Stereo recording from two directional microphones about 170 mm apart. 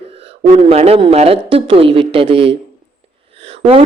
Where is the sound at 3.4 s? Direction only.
35° right (ahead or behind).